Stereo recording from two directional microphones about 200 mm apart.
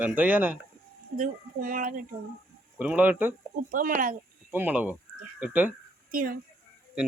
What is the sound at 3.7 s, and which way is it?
Speech, 45° right (ahead or behind).